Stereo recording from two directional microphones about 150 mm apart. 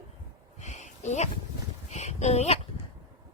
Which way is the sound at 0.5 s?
50° left (ahead or behind).